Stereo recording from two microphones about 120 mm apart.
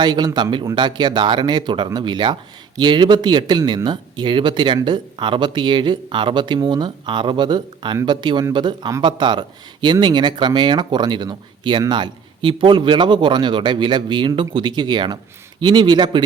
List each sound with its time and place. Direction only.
0.0 s speech: 35° right (ahead or behind)